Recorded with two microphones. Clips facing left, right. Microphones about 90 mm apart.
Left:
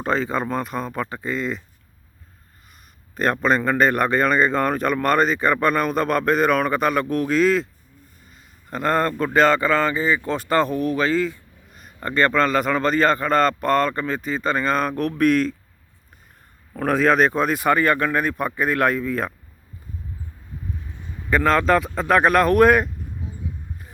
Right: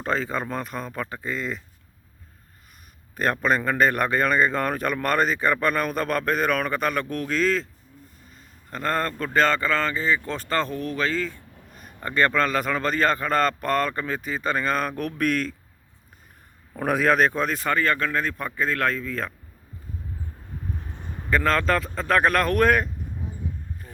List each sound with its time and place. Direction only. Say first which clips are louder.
0.0 s speech: left 4 dB; centre (ahead or behind)
3.4 s speech: left 3 dB; centre (ahead or behind)
16.7 s speech: left 3 dB; 5° right (ahead or behind); by 19.3 s 15° left (ahead or behind)
21.0 s a sound: even; 50° right (ahead or behind)
21.2 s speech: left 4 dB; 5° left (ahead or behind)